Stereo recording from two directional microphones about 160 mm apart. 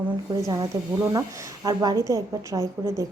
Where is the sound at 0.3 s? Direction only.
25° right (ahead or behind).